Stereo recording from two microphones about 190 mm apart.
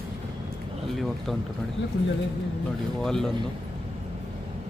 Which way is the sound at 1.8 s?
75° left (ahead or behind).